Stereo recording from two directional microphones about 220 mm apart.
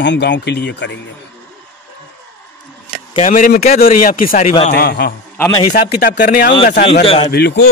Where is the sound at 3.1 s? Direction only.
35° left (ahead or behind); by 7.0 s 50° left (ahead or behind).